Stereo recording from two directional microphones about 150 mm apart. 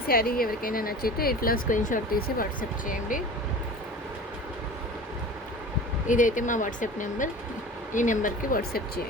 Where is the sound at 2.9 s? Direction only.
65° left (ahead or behind).